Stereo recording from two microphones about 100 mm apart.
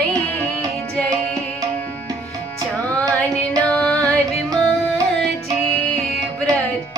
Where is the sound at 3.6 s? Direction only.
10° left (ahead or behind).